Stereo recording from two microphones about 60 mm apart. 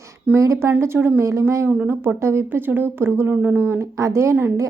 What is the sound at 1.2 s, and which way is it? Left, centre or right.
Speech, right.